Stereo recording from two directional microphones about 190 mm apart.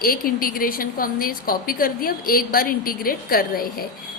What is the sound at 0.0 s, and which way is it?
A woman's voice, 50° left (ahead or behind).